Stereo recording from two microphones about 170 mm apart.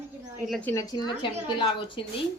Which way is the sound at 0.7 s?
20° left (ahead or behind).